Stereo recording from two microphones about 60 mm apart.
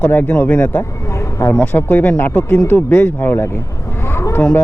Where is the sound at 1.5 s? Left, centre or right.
Left.